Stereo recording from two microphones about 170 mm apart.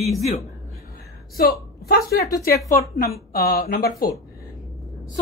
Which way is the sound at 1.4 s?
65° left (ahead or behind).